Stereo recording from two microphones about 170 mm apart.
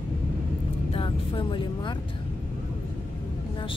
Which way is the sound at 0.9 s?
30° left (ahead or behind).